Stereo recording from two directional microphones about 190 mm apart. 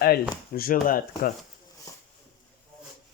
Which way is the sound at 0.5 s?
50° left (ahead or behind).